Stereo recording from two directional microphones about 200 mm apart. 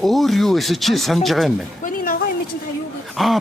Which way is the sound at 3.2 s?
Centre (ahead or behind).